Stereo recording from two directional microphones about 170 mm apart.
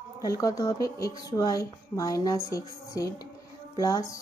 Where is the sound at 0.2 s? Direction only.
20° left (ahead or behind).